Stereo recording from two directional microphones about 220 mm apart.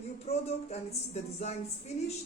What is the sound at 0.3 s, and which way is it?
Speech, 30° left (ahead or behind).